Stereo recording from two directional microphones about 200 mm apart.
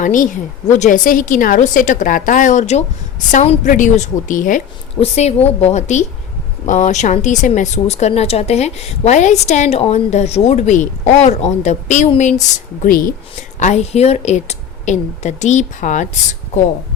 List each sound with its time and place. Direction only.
0.0 s a woman's voice: 40° left (ahead or behind)